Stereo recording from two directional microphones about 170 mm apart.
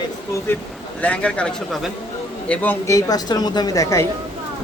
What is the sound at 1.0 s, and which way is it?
A woman's voice, 10° left (ahead or behind).